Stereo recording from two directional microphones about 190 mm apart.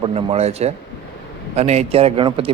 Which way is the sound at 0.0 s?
30° right (ahead or behind).